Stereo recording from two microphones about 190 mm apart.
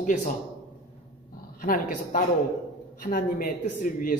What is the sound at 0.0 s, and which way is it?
Speech, 40° left (ahead or behind).